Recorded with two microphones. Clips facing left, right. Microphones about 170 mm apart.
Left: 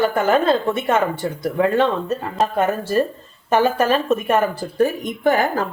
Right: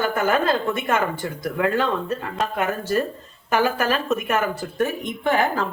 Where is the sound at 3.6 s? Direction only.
30° left (ahead or behind).